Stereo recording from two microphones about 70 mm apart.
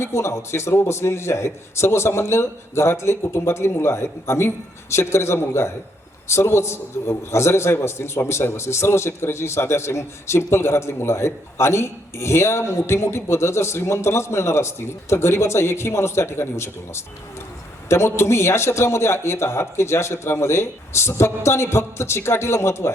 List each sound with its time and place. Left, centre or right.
0.0 s a man's voice: left